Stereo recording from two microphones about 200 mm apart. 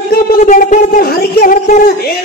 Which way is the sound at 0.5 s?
40° left (ahead or behind).